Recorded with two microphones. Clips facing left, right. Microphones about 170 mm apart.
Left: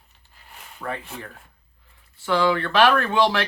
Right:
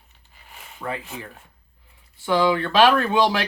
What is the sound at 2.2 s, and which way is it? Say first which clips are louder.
Speech: right 1 dB; 20° right (ahead or behind).